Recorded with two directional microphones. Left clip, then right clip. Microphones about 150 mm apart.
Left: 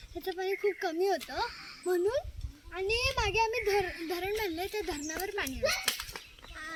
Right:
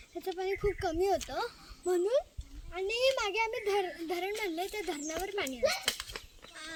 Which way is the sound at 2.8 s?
60° right (ahead or behind).